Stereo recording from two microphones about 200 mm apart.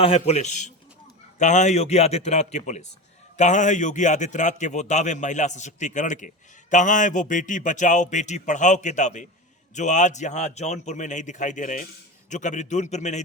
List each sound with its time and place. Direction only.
0.0 s a man's voice: 30° left (ahead or behind)